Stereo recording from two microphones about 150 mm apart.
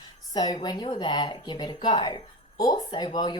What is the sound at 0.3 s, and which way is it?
Speech, 30° left (ahead or behind).